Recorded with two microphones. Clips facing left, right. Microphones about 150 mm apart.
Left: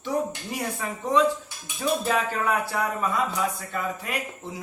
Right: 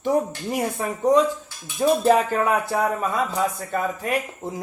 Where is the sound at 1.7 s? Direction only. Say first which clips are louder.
Right 7 dB; 45° right (ahead or behind).